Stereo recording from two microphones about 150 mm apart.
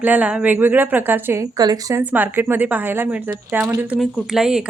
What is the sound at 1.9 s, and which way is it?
A woman's voice, 10° right (ahead or behind).